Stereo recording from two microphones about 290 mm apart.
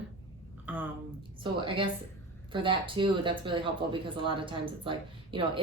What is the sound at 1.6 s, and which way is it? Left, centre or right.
Speech, centre.